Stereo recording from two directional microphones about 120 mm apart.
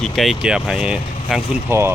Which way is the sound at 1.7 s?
20° right (ahead or behind).